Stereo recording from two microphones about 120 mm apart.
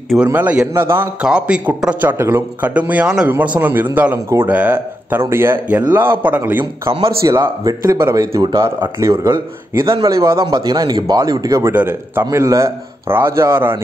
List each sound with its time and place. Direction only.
0.3 s speech: 15° right (ahead or behind)
1.2 s a man's voice: 10° right (ahead or behind)
6.6 s a man's voice: 45° right (ahead or behind)
7.2 s speech: 25° right (ahead or behind)
11.7 s speech: 20° right (ahead or behind)